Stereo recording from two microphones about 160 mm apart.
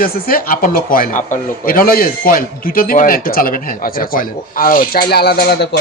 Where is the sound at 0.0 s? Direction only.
65° left (ahead or behind).